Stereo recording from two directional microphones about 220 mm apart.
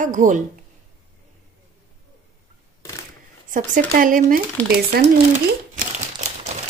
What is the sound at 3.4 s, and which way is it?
Speech, 40° right (ahead or behind).